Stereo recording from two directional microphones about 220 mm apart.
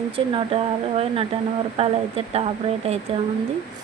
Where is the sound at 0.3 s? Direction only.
25° right (ahead or behind).